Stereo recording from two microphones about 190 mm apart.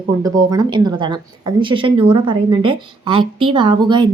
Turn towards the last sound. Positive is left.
turn(degrees=-25)  # may be behind; listen again after turning